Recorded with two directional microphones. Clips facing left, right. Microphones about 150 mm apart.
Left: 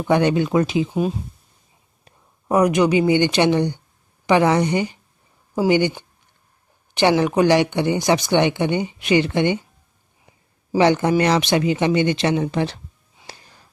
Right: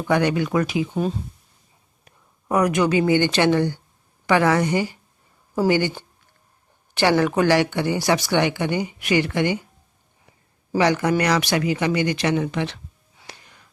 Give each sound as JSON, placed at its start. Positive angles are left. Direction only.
{"t": 0.0, "sound": "speech", "side_deg": 25}
{"t": 0.9, "sound": "speech", "side_deg": 10}
{"t": 2.0, "sound": "a sound", "side_deg": 25}
{"t": 3.1, "sound": "speech", "side_deg": 15}
{"t": 10.8, "sound": "speech", "side_deg": 25}
{"t": 13.2, "sound": "a sound", "side_deg": 30}